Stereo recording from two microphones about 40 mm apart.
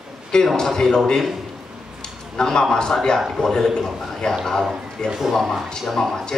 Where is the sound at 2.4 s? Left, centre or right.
Centre.